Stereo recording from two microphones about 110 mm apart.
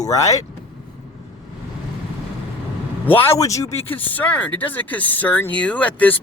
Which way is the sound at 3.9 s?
15° left (ahead or behind).